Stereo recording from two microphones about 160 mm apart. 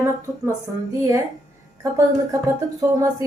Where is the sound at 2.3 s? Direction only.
20° right (ahead or behind).